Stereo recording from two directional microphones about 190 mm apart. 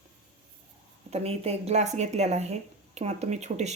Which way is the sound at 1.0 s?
35° right (ahead or behind).